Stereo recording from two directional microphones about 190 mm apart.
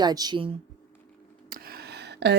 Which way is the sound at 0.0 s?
20° right (ahead or behind).